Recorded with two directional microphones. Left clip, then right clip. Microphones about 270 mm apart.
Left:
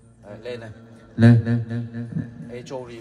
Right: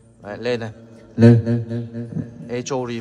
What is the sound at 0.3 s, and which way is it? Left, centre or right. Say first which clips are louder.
Speech: right 10 dB; right.